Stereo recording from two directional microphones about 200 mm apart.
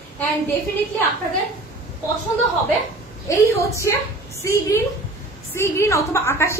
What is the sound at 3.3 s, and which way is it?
A woman's voice, 15° left (ahead or behind).